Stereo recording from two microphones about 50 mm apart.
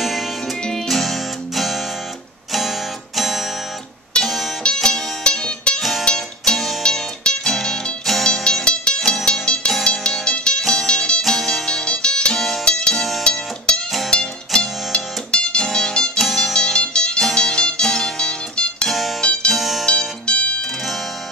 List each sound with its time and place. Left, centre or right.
0.8 s music: centre
3.2 s music: centre
5.8 s music: centre
6.8 s music: centre
11.2 s music: centre
12.9 s music: centre
13.2 s music: centre
16.2 s music: centre
16.5 s music: centre
18.9 s music: centre
19.2 s music: left
19.5 s music: centre
19.9 s music: left